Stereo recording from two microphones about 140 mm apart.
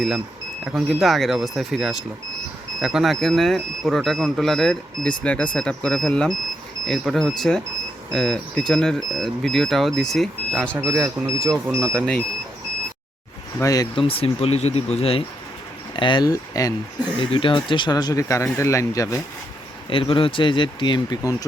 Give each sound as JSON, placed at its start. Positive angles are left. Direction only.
{"t": 0.6, "sound": "speech", "side_deg": -5}
{"t": 10.8, "sound": "speech", "side_deg": -20}
{"t": 13.6, "sound": "speech", "side_deg": 25}
{"t": 13.9, "sound": "speech", "side_deg": 40}
{"t": 16.0, "sound": "speech", "side_deg": 35}
{"t": 17.2, "sound": "speech", "side_deg": 35}
{"t": 19.9, "sound": "speech", "side_deg": 40}